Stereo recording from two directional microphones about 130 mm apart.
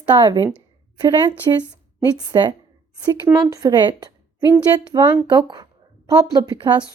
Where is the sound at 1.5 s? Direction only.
30° right (ahead or behind).